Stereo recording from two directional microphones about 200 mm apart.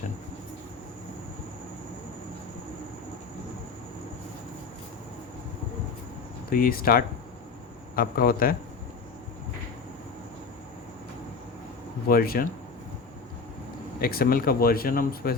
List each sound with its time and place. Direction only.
6.5 s speech: 45° left (ahead or behind)
12.0 s speech: 45° left (ahead or behind)
14.0 s speech: 45° left (ahead or behind)